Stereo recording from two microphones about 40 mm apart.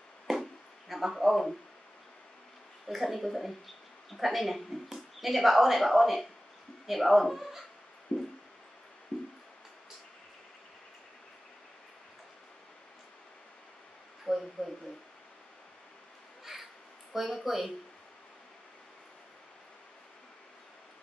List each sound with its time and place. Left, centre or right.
0.3 s chop: centre
2.9 s speech: centre
8.1 s music: left
14.3 s a sound: centre
16.5 s crow: centre
17.1 s a sound: centre